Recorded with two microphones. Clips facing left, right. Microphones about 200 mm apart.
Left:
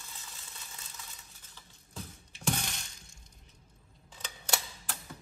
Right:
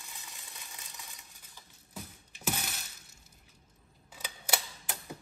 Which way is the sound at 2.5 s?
5° right (ahead or behind).